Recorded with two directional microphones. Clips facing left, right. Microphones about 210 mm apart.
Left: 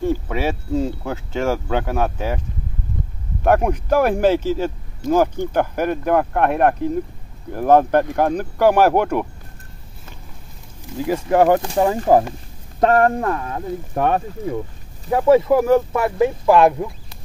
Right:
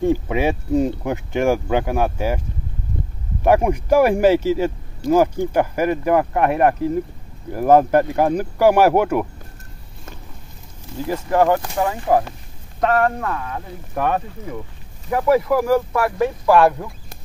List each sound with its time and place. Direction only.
0.0 s speech: 15° right (ahead or behind)
3.4 s speech: 10° right (ahead or behind)
11.1 s speech: 15° left (ahead or behind)
11.6 s speech: 30° left (ahead or behind)